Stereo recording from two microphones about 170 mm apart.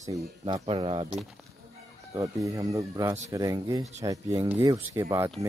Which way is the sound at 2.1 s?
20° right (ahead or behind).